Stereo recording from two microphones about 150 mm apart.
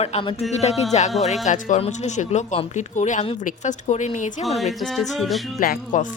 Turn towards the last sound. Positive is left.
turn(degrees=65)  # may be behind; listen again after turning